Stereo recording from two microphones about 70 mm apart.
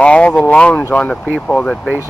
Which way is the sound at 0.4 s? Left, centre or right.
Centre.